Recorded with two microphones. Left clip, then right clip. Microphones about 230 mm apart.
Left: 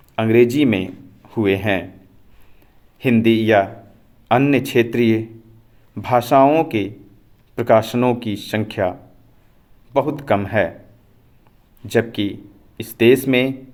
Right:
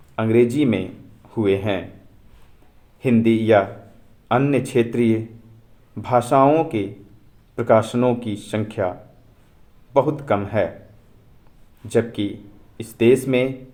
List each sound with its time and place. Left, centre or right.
0.2 s speech: left
3.0 s speech: left
11.9 s speech: left